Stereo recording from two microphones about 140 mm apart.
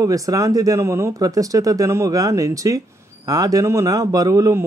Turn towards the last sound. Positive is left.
turn(degrees=-25)  # may be behind; listen again after turning